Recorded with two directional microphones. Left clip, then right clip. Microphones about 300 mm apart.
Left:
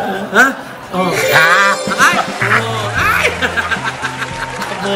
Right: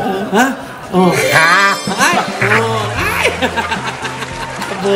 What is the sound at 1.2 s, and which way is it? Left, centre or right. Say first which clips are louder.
Speech: left 2 dB; centre.